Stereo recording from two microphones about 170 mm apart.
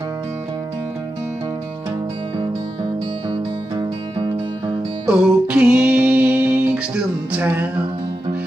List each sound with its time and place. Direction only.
2.3 s music: 25° right (ahead or behind)
5.0 s music: 5° right (ahead or behind)